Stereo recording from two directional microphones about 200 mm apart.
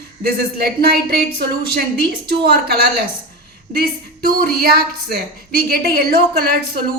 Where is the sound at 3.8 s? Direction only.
50° right (ahead or behind).